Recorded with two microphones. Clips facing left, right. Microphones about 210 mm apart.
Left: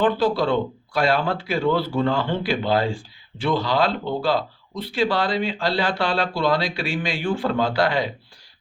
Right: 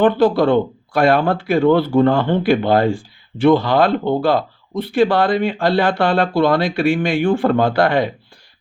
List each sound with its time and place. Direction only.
0.0 s speech: 55° right (ahead or behind)